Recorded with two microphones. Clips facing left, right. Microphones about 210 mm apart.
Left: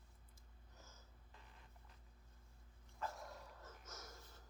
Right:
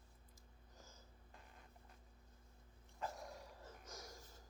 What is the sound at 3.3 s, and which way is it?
Dog, 15° right (ahead or behind).